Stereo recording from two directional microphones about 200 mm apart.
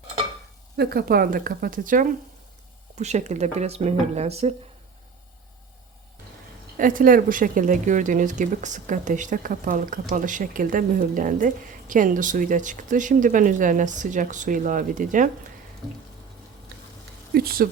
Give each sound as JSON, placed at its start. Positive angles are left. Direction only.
{"t": 0.8, "sound": "speech", "side_deg": -50}
{"t": 6.7, "sound": "speech", "side_deg": -45}
{"t": 17.3, "sound": "speech", "side_deg": -50}